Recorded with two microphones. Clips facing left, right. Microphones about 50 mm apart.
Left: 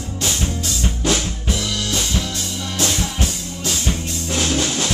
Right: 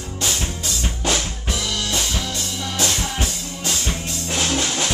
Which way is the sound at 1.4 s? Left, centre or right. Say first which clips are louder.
Left 2 dB; centre.